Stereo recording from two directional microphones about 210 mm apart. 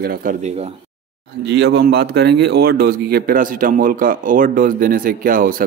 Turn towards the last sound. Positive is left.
turn(degrees=-40)  # may be behind; listen again after turning